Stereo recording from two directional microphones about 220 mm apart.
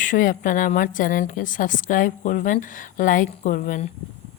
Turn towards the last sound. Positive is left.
turn(degrees=35)  # may be behind; listen again after turning